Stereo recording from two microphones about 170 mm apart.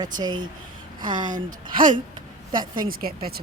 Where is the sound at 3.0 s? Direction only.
60° right (ahead or behind).